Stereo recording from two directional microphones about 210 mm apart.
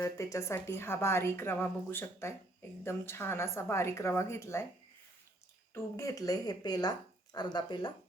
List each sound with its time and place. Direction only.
0.0 s a woman's voice: 15° left (ahead or behind)
5.7 s a woman's voice: 15° left (ahead or behind)